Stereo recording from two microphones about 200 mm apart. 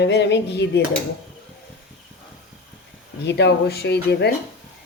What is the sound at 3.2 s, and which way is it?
Speech, 60° left (ahead or behind).